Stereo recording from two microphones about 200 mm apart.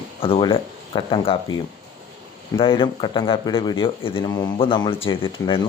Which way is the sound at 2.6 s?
25° left (ahead or behind).